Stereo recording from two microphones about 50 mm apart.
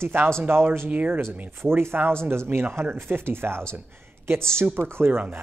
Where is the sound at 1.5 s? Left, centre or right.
Right.